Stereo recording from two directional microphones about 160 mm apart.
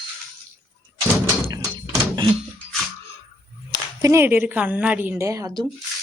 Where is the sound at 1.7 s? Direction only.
30° right (ahead or behind).